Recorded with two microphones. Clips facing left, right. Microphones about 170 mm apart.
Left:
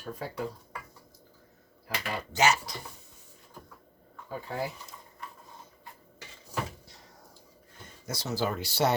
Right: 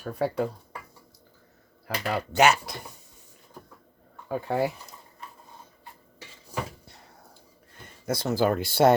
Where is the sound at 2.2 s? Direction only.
60° right (ahead or behind).